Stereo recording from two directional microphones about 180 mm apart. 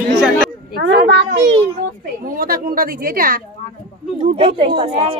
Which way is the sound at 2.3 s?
50° right (ahead or behind).